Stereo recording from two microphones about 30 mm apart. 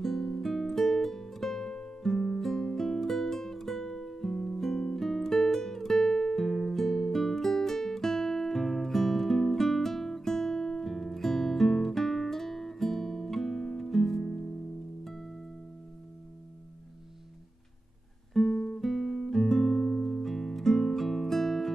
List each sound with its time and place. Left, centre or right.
0.0 s music: centre
1.7 s music: left; by 14.2 s centre
14.2 s music: left
18.3 s guitar: centre
20.1 s music: centre